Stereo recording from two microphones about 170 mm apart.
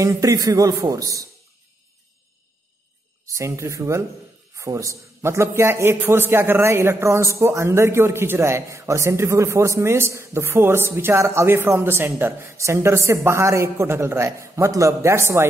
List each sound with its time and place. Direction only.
0.0 s a man's voice: 20° right (ahead or behind)
3.3 s a man's voice: 15° right (ahead or behind)